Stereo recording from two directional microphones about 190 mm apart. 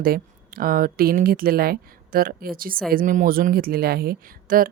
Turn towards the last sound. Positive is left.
turn(degrees=-50)  # may be behind; listen again after turning